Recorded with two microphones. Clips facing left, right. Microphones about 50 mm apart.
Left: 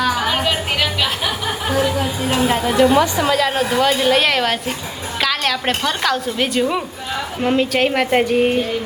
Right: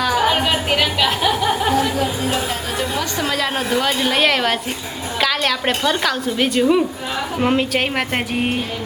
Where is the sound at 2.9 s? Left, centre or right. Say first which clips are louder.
Left 8 dB; centre.